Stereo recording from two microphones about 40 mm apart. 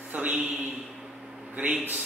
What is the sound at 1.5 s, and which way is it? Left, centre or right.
Speech, right.